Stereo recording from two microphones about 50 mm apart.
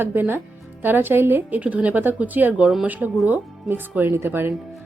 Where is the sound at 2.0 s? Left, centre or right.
Right.